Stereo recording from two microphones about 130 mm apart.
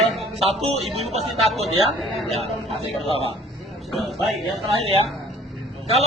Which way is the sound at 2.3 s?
55° right (ahead or behind).